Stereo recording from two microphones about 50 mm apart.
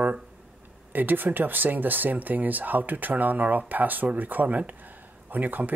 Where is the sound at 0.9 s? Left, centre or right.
Right.